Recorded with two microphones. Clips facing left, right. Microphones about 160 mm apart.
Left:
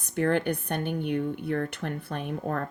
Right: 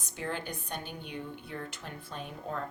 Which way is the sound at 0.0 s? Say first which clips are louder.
Left 12 dB; 60° left (ahead or behind).